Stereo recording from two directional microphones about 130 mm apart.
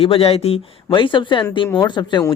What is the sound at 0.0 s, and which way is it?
Speech, 45° left (ahead or behind).